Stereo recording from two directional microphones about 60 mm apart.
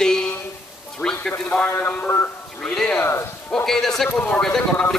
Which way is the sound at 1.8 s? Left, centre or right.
Left.